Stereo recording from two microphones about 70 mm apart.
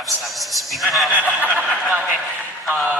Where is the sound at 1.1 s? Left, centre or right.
Right.